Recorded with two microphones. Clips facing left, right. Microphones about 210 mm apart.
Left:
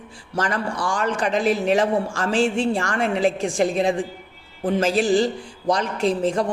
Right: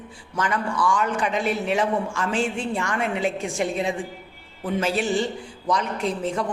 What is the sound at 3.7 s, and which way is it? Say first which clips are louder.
Speech: left 5 dB; 35° left (ahead or behind).